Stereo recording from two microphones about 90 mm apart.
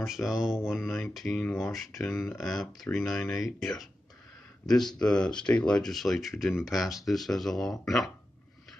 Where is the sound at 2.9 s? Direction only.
20° left (ahead or behind).